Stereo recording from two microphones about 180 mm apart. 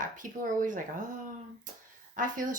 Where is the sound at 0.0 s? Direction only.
45° right (ahead or behind).